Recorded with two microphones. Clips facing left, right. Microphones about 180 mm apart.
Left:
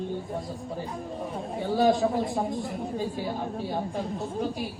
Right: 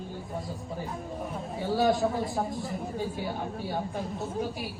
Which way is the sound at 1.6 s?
Centre (ahead or behind).